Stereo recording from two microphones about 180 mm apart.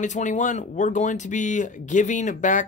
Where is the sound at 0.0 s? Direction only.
40° left (ahead or behind).